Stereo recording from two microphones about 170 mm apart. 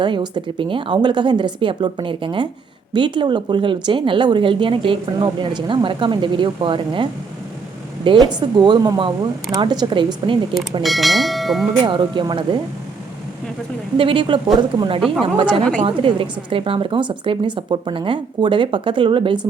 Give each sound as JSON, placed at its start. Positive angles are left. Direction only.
{"t": 0.0, "sound": "speech", "side_deg": -25}
{"t": 10.8, "sound": "speech", "side_deg": 0}
{"t": 11.9, "sound": "speech", "side_deg": -25}
{"t": 13.9, "sound": "a woman's voice", "side_deg": -30}